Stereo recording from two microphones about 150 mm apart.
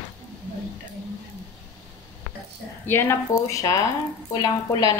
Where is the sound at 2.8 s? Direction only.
15° left (ahead or behind).